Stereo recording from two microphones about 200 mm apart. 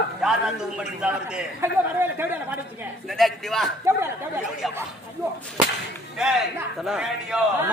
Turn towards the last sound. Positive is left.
turn(degrees=-5)  # may be behind; listen again after turning